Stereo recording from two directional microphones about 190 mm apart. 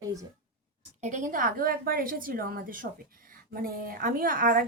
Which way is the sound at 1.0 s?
40° right (ahead or behind).